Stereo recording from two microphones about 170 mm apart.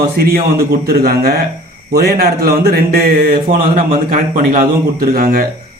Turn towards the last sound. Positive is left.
turn(degrees=-60)  # may be behind; listen again after turning